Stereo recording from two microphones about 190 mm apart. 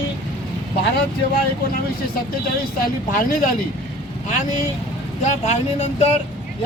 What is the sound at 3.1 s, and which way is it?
Speech, 45° left (ahead or behind).